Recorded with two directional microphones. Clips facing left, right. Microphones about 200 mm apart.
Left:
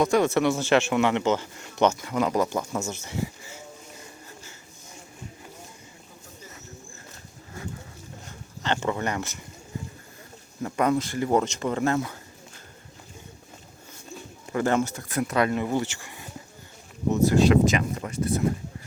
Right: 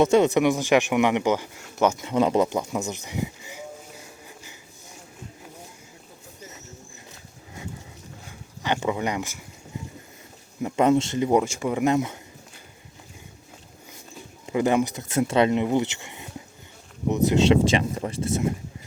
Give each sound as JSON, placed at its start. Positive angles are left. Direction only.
{"t": 0.0, "sound": "speech", "side_deg": -20}
{"t": 1.9, "sound": "speech", "side_deg": -20}
{"t": 8.3, "sound": "speech", "side_deg": -15}
{"t": 10.6, "sound": "speech", "side_deg": -20}
{"t": 14.4, "sound": "speech", "side_deg": -15}